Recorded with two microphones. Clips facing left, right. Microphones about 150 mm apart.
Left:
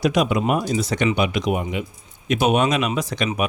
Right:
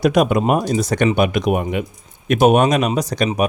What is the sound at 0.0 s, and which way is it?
Speech, 50° right (ahead or behind).